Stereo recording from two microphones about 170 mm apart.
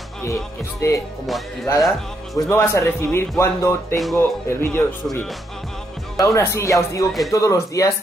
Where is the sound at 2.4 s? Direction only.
15° left (ahead or behind).